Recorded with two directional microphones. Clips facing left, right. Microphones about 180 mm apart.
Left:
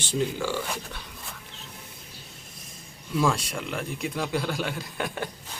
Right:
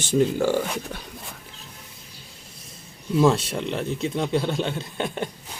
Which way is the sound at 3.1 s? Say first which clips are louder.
Right 6 dB; 25° right (ahead or behind).